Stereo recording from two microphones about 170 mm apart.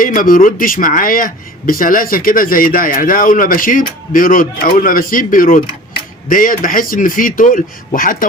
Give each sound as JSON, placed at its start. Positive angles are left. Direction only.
{"t": 0.0, "sound": "speech", "side_deg": 55}